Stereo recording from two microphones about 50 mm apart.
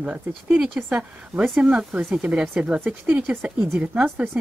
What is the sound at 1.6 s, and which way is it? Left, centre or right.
A woman's voice, right.